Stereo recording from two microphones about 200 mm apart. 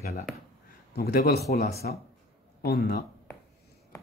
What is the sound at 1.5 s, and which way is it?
Speech, 50° left (ahead or behind).